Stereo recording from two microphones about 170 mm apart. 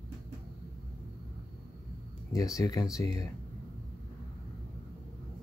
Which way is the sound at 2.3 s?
20° left (ahead or behind).